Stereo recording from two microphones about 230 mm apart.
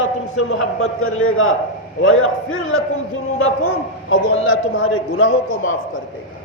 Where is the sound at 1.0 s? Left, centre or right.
Left.